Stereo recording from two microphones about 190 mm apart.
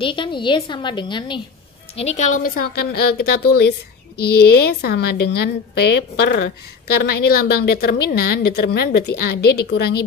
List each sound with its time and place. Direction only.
0.0 s a woman's voice: 25° left (ahead or behind)
2.0 s a woman's voice: 35° left (ahead or behind); by 9.8 s 60° left (ahead or behind)